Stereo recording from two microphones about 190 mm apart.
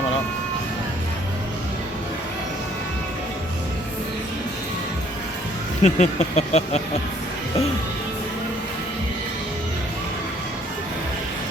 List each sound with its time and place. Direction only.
5.8 s speech: 35° left (ahead or behind)